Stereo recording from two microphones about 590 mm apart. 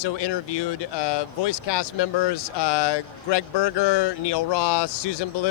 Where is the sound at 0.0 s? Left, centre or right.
Left.